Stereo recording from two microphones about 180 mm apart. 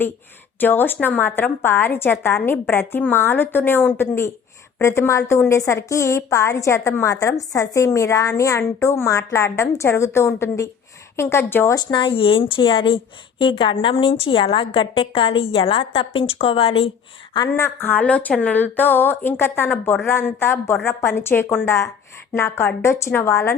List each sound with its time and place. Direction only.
0.6 s a woman's voice: 10° left (ahead or behind); by 16.9 s 30° left (ahead or behind)
17.5 s a woman's voice: 10° left (ahead or behind)